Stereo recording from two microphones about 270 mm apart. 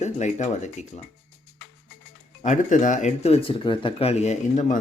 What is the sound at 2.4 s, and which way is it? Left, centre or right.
Speech, left.